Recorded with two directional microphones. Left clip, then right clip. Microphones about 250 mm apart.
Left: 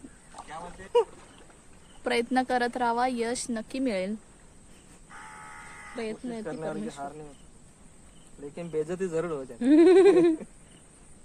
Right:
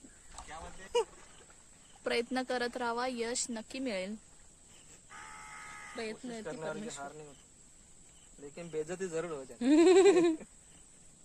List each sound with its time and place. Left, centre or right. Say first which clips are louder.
0.4 s a sound: left 7 dB; centre
0.9 s speech: left 8 dB; right
2.0 s speech: left 7 dB; centre
5.1 s bleat: left 4 dB; right
6.4 s speech: left 5 dB; right
8.5 s speech: left 7 dB; centre
9.6 s a sound: left 6 dB; right